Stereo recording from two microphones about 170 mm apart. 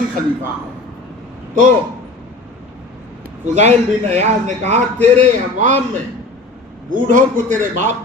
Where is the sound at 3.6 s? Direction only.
40° right (ahead or behind).